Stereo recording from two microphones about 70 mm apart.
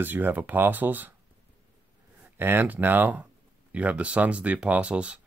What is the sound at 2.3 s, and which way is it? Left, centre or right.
Speech, right.